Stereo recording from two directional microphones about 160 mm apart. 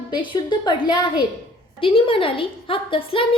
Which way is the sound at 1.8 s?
35° left (ahead or behind).